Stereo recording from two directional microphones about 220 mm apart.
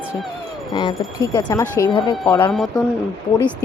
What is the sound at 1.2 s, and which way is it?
Speech, 15° left (ahead or behind).